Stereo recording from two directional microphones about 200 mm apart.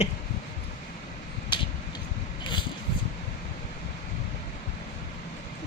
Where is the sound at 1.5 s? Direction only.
25° left (ahead or behind).